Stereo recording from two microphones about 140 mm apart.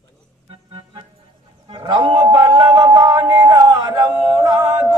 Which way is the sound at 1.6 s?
40° right (ahead or behind).